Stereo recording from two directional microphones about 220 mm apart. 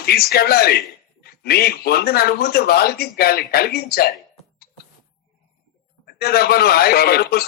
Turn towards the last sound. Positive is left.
turn(degrees=45)  # may be behind; listen again after turning